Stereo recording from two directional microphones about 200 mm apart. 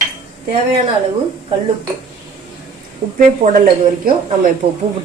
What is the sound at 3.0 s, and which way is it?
Speech, 25° right (ahead or behind).